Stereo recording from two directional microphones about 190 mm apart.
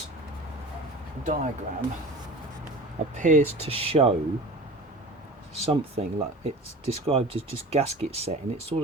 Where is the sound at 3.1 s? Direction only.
40° right (ahead or behind).